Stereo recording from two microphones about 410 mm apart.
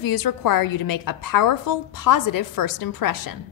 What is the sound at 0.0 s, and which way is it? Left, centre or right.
A woman's voice, left.